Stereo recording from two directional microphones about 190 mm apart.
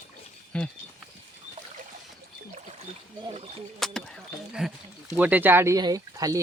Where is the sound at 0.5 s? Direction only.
5° left (ahead or behind).